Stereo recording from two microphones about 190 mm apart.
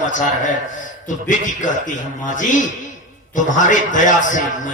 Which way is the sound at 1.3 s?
40° left (ahead or behind).